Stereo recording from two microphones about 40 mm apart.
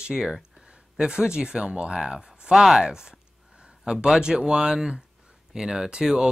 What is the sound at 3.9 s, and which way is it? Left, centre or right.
Speech, centre.